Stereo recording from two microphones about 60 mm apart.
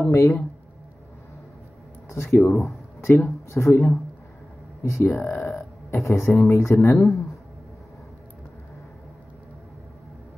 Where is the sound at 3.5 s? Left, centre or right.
Left.